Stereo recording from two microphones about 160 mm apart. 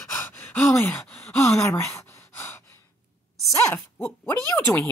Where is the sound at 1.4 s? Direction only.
15° left (ahead or behind).